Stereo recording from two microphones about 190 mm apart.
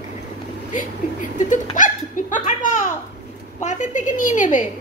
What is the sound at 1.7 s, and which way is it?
A woman's voice, 45° left (ahead or behind).